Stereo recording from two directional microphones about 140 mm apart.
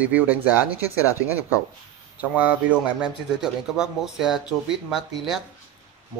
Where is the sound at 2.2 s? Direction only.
10° right (ahead or behind).